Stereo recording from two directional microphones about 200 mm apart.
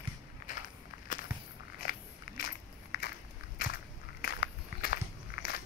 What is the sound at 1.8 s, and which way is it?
Biting, 45° left (ahead or behind).